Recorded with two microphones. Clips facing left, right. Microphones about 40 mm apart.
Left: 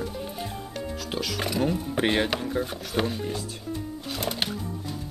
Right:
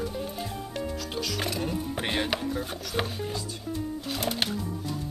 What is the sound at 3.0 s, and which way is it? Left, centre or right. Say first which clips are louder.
Music: left 4 dB; centre.